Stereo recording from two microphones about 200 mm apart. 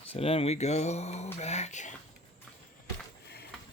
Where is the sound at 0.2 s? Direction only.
30° left (ahead or behind).